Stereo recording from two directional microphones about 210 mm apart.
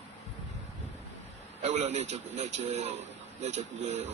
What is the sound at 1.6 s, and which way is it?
A man's voice, 30° right (ahead or behind).